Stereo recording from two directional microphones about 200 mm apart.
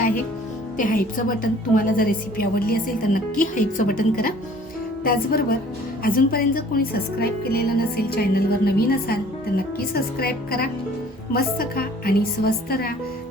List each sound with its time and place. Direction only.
0.8 s a woman's voice: 45° left (ahead or behind)